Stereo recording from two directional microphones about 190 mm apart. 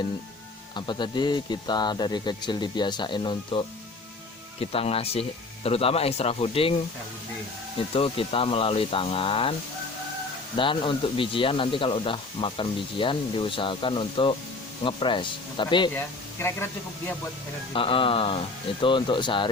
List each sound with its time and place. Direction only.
0.8 s speech: 25° left (ahead or behind)
7.9 s speech: 30° left (ahead or behind)
10.6 s speech: 25° left (ahead or behind)
16.0 s speech: 10° left (ahead or behind)
17.7 s speech: 30° left (ahead or behind)